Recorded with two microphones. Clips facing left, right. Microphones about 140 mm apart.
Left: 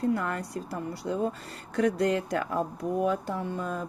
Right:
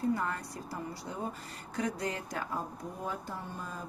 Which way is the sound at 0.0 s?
65° left (ahead or behind).